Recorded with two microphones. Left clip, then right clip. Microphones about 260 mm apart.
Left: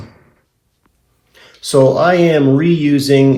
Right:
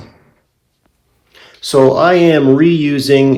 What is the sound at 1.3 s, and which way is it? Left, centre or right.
Speech, right.